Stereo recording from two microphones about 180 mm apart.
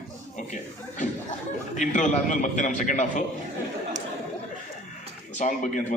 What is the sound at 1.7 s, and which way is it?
A man's voice, 45° left (ahead or behind).